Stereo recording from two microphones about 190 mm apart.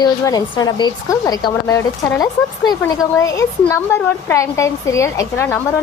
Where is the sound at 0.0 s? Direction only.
20° left (ahead or behind).